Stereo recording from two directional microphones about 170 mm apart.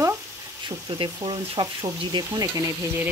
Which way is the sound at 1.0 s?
30° right (ahead or behind).